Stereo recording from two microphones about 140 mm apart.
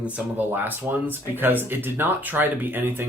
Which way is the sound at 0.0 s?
15° right (ahead or behind).